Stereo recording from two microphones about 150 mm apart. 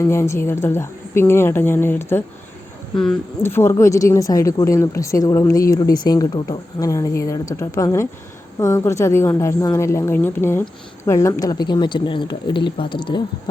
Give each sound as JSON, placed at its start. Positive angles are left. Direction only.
{"t": 0.0, "sound": "a woman's voice", "side_deg": 15}
{"t": 3.4, "sound": "a woman's voice", "side_deg": 15}